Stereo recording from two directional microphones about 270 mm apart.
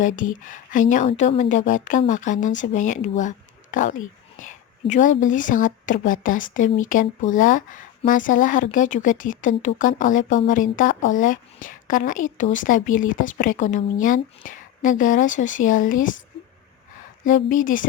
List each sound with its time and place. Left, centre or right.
0.0 s speech: left
17.2 s speech: left